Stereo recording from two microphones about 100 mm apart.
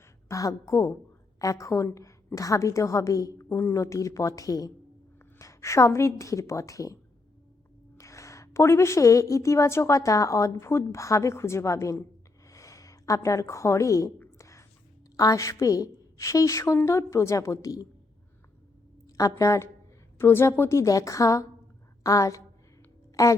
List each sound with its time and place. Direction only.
0.3 s a woman's voice: 35° left (ahead or behind)
14.3 s whispering: 30° left (ahead or behind)
15.2 s a woman's voice: 35° left (ahead or behind)
19.0 s a woman's voice: 35° left (ahead or behind)